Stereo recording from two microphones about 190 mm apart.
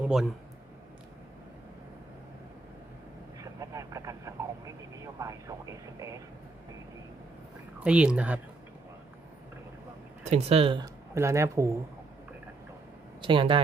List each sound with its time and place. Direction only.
0.0 s a man's voice: 5° right (ahead or behind)
3.4 s vehicle: 15° right (ahead or behind)
7.9 s speech: 5° right (ahead or behind)
10.2 s speech: 35° right (ahead or behind); by 11.8 s 15° right (ahead or behind)
13.2 s speech: 25° right (ahead or behind)